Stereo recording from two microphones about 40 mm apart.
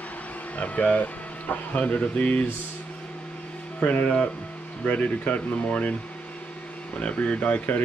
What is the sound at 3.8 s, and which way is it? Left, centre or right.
Speech, left.